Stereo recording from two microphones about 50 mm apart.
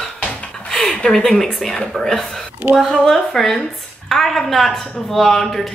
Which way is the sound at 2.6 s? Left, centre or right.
Right.